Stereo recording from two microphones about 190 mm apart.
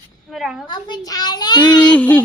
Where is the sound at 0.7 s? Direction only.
25° left (ahead or behind).